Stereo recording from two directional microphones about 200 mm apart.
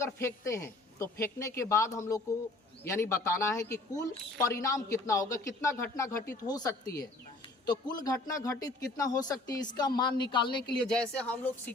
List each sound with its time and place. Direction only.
0.0 s a man's voice: 15° left (ahead or behind)
10.8 s speech: 5° left (ahead or behind)